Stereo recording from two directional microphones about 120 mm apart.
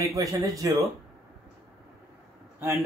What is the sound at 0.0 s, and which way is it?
Speech, 25° right (ahead or behind).